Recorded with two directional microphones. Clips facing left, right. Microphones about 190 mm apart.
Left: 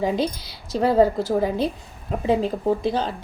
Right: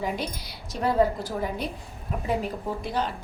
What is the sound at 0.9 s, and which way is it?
A woman's voice, 30° left (ahead or behind).